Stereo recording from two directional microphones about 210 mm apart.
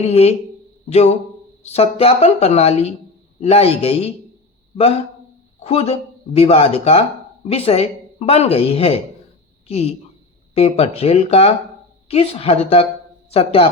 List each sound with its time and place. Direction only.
0.0 s speech: 30° left (ahead or behind)
5.6 s speech: 30° left (ahead or behind)